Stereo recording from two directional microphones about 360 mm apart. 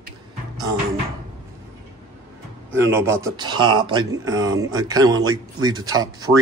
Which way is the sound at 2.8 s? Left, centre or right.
Centre.